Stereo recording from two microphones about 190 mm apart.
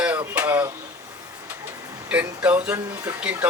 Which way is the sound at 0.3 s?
10° right (ahead or behind).